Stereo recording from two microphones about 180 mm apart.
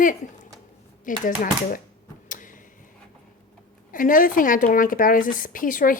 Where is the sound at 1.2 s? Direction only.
45° left (ahead or behind).